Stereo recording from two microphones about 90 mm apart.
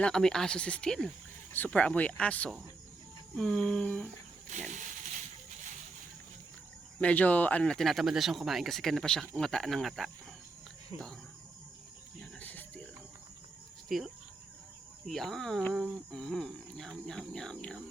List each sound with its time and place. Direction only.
0.0 s speech: 5° left (ahead or behind)
7.0 s speech: 15° left (ahead or behind)
12.4 s cricket: 20° left (ahead or behind)
13.8 s speech: centre (ahead or behind)